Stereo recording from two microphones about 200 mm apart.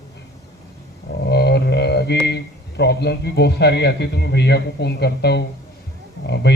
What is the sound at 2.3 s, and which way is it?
A man's voice, 55° left (ahead or behind).